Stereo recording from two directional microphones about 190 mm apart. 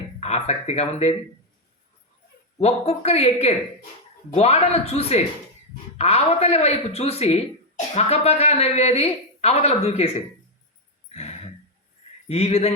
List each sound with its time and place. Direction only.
0.2 s speech: 35° left (ahead or behind)
2.6 s speech: 35° left (ahead or behind)
11.1 s a sound: 35° left (ahead or behind)
12.3 s speech: 30° left (ahead or behind)